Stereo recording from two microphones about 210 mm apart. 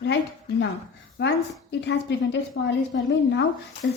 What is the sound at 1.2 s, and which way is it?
A woman's voice, 55° left (ahead or behind).